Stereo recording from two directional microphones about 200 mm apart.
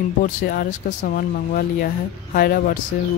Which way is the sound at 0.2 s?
45° left (ahead or behind).